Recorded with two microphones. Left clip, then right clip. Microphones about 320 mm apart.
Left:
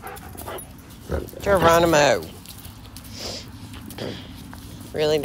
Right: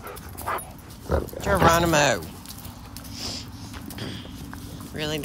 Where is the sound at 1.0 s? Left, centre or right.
Centre.